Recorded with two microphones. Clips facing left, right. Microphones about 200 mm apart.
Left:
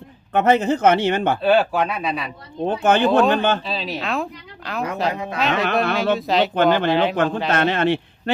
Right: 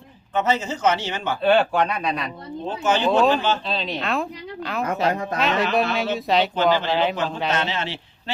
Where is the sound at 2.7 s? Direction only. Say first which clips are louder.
Left 3 dB; 55° left (ahead or behind).